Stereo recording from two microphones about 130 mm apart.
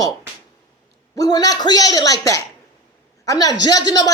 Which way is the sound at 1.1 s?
30° left (ahead or behind).